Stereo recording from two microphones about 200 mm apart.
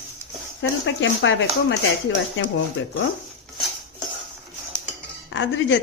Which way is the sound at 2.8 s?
75° left (ahead or behind).